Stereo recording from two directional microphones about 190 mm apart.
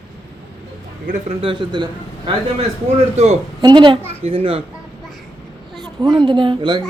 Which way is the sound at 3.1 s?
35° right (ahead or behind).